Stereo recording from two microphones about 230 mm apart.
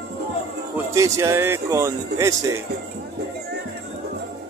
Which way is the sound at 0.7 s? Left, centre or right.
Centre.